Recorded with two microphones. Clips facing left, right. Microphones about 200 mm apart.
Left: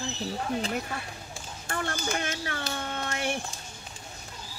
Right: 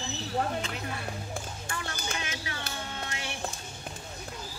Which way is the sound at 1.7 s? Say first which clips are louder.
Left 7 dB; 55° left (ahead or behind).